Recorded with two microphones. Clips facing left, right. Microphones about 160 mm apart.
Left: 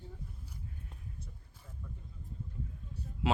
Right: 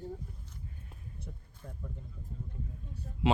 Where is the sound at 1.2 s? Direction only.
60° right (ahead or behind).